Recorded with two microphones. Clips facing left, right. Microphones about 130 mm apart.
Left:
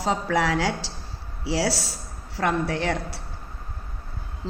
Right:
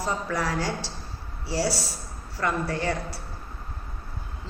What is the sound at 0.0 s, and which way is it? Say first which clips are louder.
A woman's voice: left 5 dB; 85° left.